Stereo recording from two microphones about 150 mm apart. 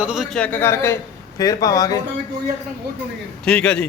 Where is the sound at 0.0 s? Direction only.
5° right (ahead or behind); by 2.0 s 25° left (ahead or behind).